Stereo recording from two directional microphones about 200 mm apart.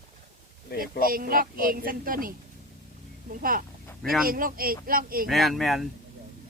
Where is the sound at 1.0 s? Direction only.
45° right (ahead or behind).